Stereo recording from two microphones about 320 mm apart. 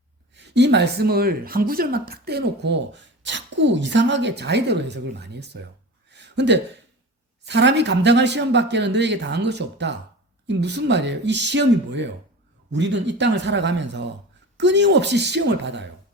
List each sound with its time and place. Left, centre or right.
0.3 s speech: right
6.1 s a sound: right
7.4 s speech: right